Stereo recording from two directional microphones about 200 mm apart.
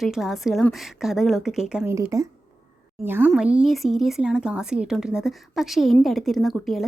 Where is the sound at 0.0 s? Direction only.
Centre (ahead or behind).